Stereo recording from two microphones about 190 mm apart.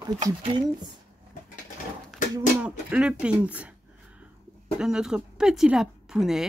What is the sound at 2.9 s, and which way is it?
Speech, 5° right (ahead or behind).